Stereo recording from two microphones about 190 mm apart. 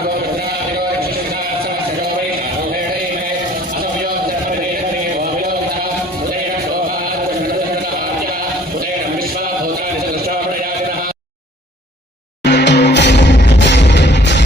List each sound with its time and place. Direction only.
12.5 s music: 65° left (ahead or behind)